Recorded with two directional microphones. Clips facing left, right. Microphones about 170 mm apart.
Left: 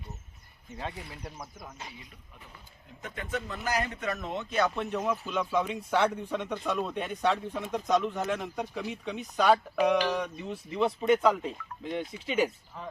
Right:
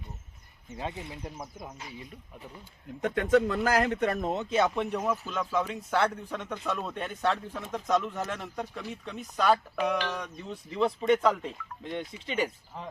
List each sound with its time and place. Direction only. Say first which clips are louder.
0.8 s speech: right 2 dB; 20° right (ahead or behind)
3.0 s a man's voice: right 12 dB; 90° right; by 4.4 s 45° right (ahead or behind)
4.4 s speech: right 1 dB; 25° right (ahead or behind)
4.8 s speech: right 1 dB; 10° right (ahead or behind)